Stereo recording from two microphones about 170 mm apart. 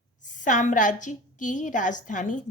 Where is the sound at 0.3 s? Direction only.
50° left (ahead or behind).